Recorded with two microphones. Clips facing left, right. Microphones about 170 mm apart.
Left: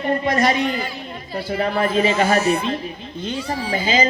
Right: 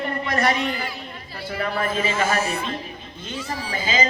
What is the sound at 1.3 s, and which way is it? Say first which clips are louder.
Speech: left 5 dB; 25° left (ahead or behind).